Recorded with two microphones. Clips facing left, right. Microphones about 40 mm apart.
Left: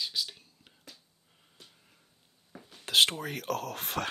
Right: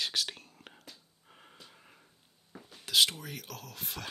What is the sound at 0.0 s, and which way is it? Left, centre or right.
Whispering, right.